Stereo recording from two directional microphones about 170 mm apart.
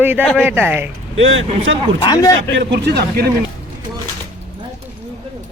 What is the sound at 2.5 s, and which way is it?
Speech, 90° right.